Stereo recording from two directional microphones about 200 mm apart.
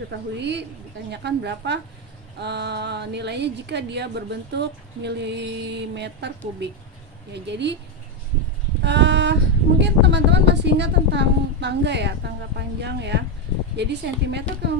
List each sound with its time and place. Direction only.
0.1 s a woman's voice: 60° right (ahead or behind)
8.8 s a woman's voice: 60° right (ahead or behind)